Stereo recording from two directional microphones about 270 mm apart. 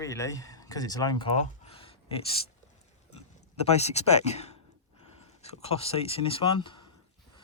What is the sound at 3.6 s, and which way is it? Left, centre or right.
Speech, left.